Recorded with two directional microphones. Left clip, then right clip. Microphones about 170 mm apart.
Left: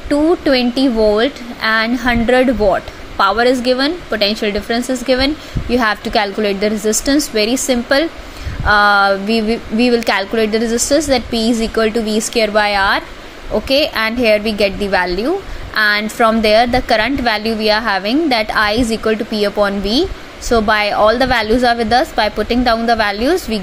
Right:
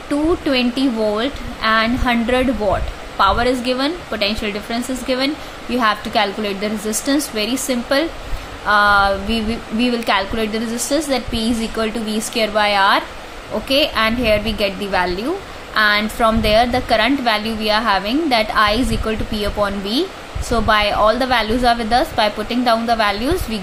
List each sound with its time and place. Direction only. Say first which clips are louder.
0.1 s a woman's voice: left 5 dB; 30° left (ahead or behind)